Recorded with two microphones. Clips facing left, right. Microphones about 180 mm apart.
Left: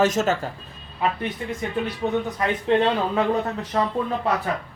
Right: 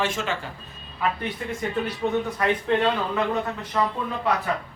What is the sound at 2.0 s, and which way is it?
Speech, 15° left (ahead or behind).